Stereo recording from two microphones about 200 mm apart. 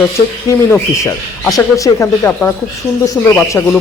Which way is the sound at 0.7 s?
15° left (ahead or behind).